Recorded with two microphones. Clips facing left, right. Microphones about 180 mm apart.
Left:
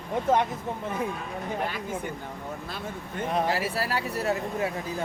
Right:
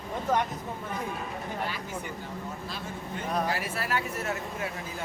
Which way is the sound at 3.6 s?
35° left (ahead or behind).